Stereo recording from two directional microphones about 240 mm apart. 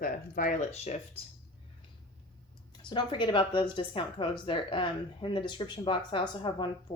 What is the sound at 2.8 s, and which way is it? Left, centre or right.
A woman's voice, centre.